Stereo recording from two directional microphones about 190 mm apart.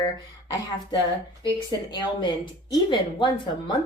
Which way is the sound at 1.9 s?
25° left (ahead or behind).